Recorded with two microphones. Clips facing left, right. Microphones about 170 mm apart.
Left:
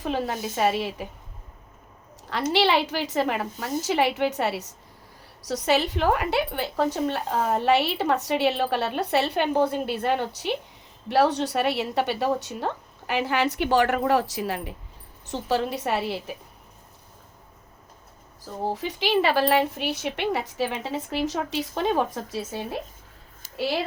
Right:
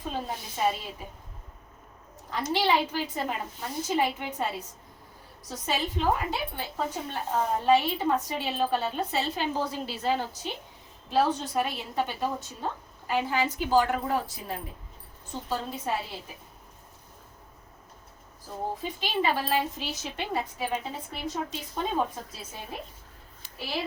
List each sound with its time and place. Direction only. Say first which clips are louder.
0.0 s speech: left 7 dB; 90° left
2.3 s a woman's voice: left 4 dB; 80° left
18.7 s speech: left 10 dB; 85° left